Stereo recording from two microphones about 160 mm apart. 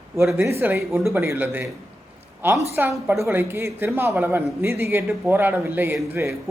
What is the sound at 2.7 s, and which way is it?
A man's voice, 15° right (ahead or behind).